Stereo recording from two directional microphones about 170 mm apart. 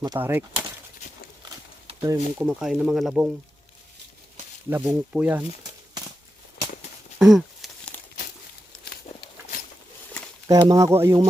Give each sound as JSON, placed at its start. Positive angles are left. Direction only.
{"t": 0.2, "sound": "speech", "side_deg": -10}
{"t": 2.0, "sound": "speech", "side_deg": -20}
{"t": 2.5, "sound": "speech", "side_deg": -5}
{"t": 4.7, "sound": "speech", "side_deg": -10}
{"t": 6.6, "sound": "a sound", "side_deg": 75}
{"t": 7.2, "sound": "a sound", "side_deg": 0}
{"t": 7.9, "sound": "crumpling", "side_deg": 10}
{"t": 10.5, "sound": "speech", "side_deg": -20}